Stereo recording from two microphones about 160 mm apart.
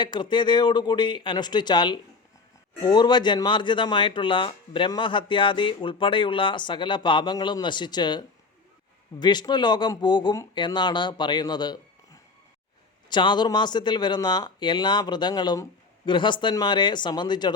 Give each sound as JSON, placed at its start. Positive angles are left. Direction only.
{"t": 0.0, "sound": "speech", "side_deg": 30}